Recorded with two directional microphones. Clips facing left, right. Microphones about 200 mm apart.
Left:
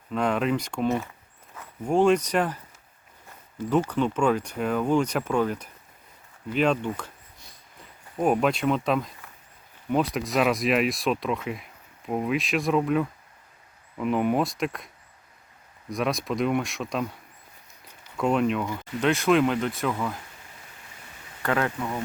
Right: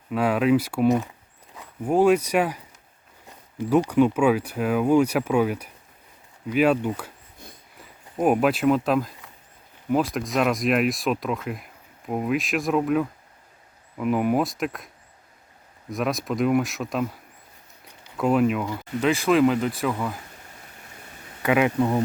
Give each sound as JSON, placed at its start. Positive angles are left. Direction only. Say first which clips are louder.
{"t": 0.1, "sound": "speech", "louder": "right 4 dB", "side_deg": -5}
{"t": 8.2, "sound": "speech", "louder": "right 3 dB", "side_deg": -5}
{"t": 15.9, "sound": "speech", "louder": "right 1 dB", "side_deg": 0}
{"t": 18.2, "sound": "speech", "louder": "right 3 dB", "side_deg": -5}
{"t": 21.4, "sound": "speech", "louder": "right 5 dB", "side_deg": -10}
{"t": 21.8, "sound": "speech", "louder": "right 9 dB", "side_deg": -30}